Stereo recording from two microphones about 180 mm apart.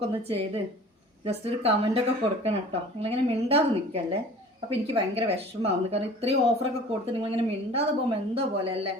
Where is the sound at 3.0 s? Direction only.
35° right (ahead or behind).